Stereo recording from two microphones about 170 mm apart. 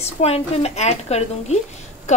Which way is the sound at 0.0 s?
35° left (ahead or behind).